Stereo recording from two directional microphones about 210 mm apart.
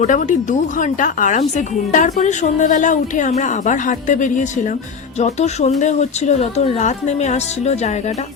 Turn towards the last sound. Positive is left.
turn(degrees=30)  # may be behind; listen again after turning